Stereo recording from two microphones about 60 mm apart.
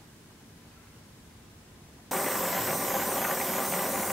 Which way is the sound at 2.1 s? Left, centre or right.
Centre.